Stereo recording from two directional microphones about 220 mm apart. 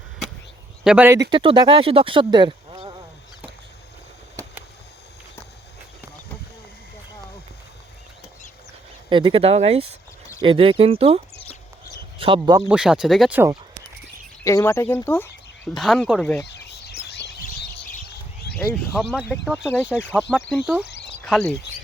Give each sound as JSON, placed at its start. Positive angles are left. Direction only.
{"t": 0.9, "sound": "speech", "side_deg": -10}
{"t": 1.3, "sound": "speech", "side_deg": -20}
{"t": 9.0, "sound": "speech", "side_deg": -20}
{"t": 11.9, "sound": "a sound", "side_deg": -20}
{"t": 12.6, "sound": "speech", "side_deg": -5}
{"t": 14.4, "sound": "speech", "side_deg": 10}
{"t": 16.5, "sound": "bird", "side_deg": 50}
{"t": 18.7, "sound": "speech", "side_deg": 5}
{"t": 19.6, "sound": "speech", "side_deg": 10}
{"t": 20.5, "sound": "speech", "side_deg": -5}
{"t": 20.8, "sound": "a sound", "side_deg": 50}